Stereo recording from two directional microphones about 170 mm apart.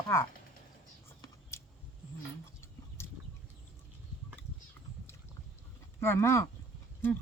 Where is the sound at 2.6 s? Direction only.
15° left (ahead or behind).